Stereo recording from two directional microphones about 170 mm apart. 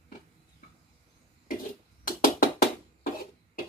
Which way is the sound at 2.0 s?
60° left (ahead or behind).